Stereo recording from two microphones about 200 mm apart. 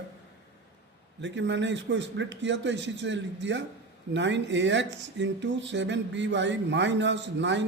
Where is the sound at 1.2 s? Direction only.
65° right (ahead or behind).